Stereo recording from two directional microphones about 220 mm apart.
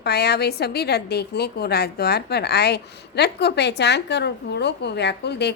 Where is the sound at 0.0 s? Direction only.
45° left (ahead or behind).